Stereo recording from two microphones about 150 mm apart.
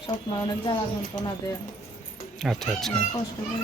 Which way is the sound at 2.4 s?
Centre (ahead or behind).